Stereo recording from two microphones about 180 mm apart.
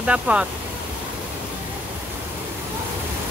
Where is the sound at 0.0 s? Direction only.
5° right (ahead or behind).